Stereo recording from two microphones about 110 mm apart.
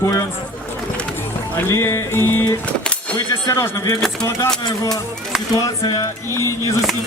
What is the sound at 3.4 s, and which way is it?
Speech, 30° left (ahead or behind).